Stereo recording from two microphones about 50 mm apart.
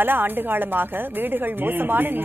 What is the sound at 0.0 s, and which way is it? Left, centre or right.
A woman's voice, right.